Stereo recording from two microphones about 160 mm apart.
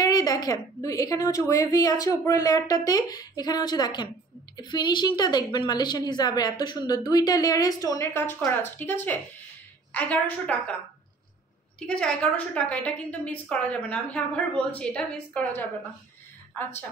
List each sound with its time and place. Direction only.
0.0 s a woman's voice: 25° left (ahead or behind); by 10.5 s 10° left (ahead or behind)
11.8 s a woman's voice: 5° left (ahead or behind)